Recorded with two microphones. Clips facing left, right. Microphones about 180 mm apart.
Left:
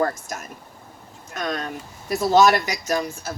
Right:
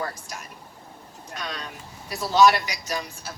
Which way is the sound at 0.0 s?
45° left (ahead or behind).